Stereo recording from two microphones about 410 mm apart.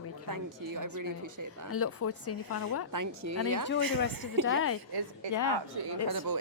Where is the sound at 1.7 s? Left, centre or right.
Left.